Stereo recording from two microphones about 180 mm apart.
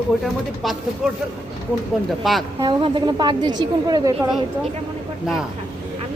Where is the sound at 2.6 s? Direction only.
25° right (ahead or behind).